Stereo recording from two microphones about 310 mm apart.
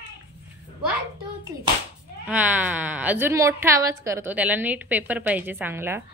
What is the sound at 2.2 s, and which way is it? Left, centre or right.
Speech, centre.